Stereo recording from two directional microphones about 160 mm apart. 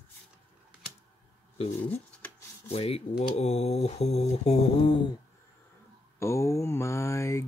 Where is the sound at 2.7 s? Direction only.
40° left (ahead or behind).